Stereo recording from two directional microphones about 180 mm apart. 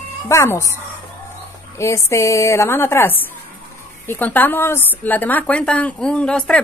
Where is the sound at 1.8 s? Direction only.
15° left (ahead or behind).